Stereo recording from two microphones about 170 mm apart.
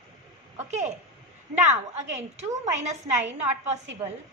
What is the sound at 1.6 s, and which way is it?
A woman's voice, 45° right (ahead or behind).